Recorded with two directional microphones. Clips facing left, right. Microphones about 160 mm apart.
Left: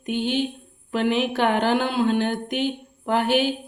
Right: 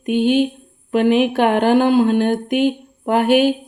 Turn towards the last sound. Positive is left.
turn(degrees=-50)  # may be behind; listen again after turning